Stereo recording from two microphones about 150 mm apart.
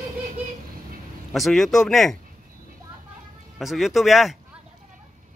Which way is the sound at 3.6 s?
Centre (ahead or behind).